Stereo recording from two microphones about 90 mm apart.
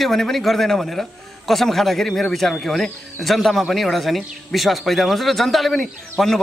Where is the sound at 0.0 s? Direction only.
5° left (ahead or behind).